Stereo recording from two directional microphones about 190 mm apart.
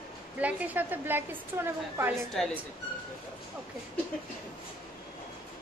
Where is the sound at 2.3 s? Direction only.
Centre (ahead or behind).